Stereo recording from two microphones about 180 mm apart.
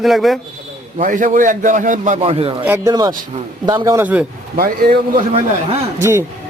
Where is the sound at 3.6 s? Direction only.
20° right (ahead or behind).